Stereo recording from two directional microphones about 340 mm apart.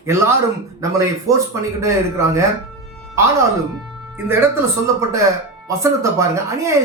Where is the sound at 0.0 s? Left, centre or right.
Centre.